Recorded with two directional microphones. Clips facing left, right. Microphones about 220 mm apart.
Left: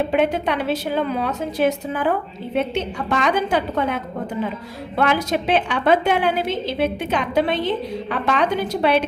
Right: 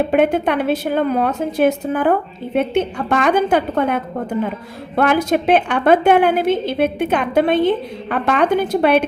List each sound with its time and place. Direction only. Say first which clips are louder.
0.1 s a woman's voice: right 4 dB; 55° right (ahead or behind)